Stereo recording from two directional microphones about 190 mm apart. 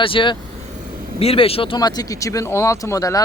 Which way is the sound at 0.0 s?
25° left (ahead or behind).